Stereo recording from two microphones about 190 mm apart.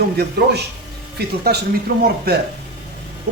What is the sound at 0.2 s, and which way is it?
A man's voice, 60° right (ahead or behind).